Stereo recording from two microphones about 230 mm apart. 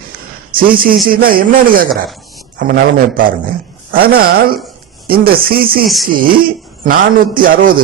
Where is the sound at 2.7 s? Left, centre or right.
Right.